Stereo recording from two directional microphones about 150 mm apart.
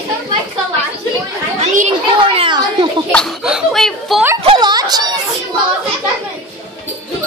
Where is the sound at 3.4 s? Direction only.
5° right (ahead or behind).